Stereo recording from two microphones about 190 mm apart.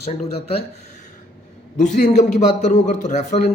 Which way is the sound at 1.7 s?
40° left (ahead or behind).